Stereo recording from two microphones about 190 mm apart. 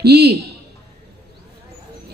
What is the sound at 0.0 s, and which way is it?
Speech, 60° right (ahead or behind).